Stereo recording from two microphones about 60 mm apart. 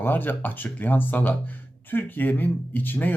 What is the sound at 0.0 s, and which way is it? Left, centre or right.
Speech, left.